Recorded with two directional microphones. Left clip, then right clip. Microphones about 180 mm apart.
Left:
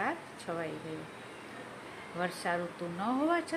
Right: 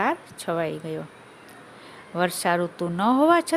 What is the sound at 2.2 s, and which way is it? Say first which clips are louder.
Speech: right 11 dB; 65° right (ahead or behind).